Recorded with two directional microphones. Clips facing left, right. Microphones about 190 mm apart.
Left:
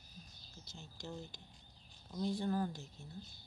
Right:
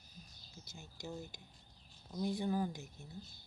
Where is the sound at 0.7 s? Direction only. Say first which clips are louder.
Right 1 dB; 10° right (ahead or behind).